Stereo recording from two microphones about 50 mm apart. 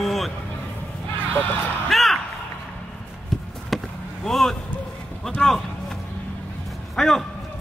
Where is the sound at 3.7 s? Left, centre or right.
Centre.